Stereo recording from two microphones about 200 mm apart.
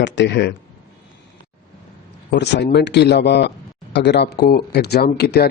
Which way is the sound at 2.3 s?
60° left (ahead or behind).